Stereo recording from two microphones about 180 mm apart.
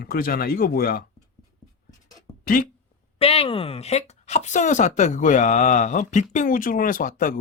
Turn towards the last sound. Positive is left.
turn(degrees=50)  # may be behind; listen again after turning